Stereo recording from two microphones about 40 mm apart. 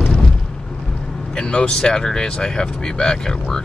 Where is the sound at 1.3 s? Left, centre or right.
Left.